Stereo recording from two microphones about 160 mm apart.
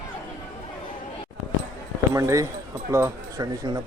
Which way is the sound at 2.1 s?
20° right (ahead or behind).